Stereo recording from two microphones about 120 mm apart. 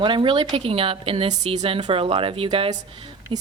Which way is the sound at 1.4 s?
65° right (ahead or behind).